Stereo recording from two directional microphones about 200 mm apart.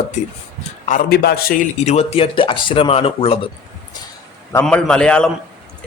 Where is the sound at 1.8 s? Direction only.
35° left (ahead or behind).